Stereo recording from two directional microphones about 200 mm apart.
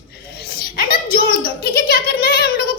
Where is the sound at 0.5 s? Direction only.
45° left (ahead or behind).